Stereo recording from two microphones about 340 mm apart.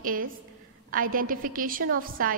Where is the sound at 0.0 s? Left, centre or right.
Right.